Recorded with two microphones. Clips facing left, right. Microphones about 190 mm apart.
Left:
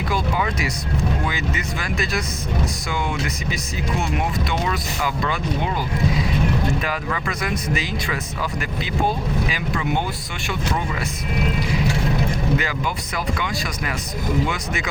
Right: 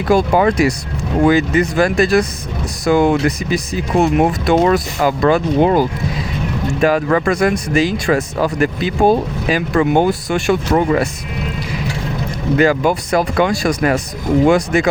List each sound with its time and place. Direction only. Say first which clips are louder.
0.1 s speech: right 13 dB; 45° right (ahead or behind)
2.9 s speech: right 16 dB; 40° right (ahead or behind)
3.2 s speech: right 10 dB; 60° right (ahead or behind)
6.8 s speech: right 12 dB; 45° right (ahead or behind)
12.5 s speech: right 11 dB; 45° right (ahead or behind)